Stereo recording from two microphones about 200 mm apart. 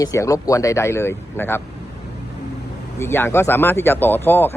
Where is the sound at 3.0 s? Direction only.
10° left (ahead or behind).